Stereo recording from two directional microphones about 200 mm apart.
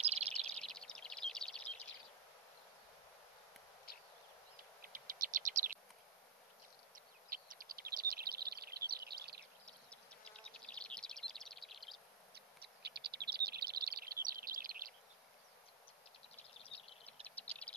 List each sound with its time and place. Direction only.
0.0 s bird: 30° right (ahead or behind)
0.5 s bird: 5° left (ahead or behind)
4.8 s bird vocalization: 45° right (ahead or behind)
7.2 s bird: 45° right (ahead or behind)
9.7 s bird: 5° left (ahead or behind)
12.4 s bird: 55° right (ahead or behind)
17.0 s a sound: 5° left (ahead or behind)